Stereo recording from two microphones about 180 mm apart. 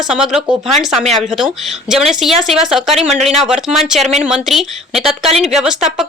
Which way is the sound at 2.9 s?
35° right (ahead or behind).